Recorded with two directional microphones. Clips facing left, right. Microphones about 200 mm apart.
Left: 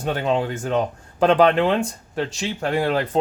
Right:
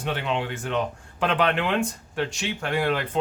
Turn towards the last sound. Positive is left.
turn(degrees=35)  # may be behind; listen again after turning